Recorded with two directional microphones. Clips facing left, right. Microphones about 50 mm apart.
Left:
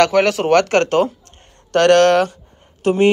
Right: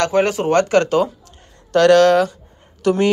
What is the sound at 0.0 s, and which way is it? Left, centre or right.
Speech, left.